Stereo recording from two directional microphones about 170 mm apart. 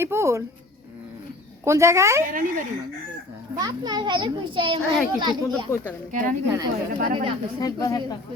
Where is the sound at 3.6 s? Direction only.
25° right (ahead or behind).